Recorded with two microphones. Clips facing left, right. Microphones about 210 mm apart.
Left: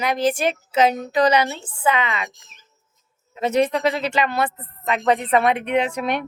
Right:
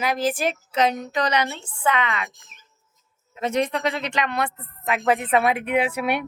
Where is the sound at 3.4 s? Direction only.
5° left (ahead or behind).